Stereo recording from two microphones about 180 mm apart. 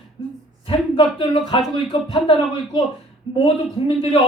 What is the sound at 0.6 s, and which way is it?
Speech, 30° left (ahead or behind).